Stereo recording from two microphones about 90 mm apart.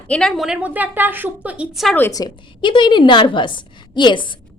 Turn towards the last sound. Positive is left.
turn(degrees=60)  # may be behind; listen again after turning